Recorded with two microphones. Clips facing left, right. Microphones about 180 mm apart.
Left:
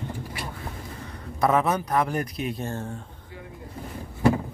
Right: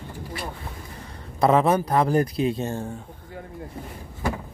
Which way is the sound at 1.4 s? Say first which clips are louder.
Right 4 dB; 30° right (ahead or behind).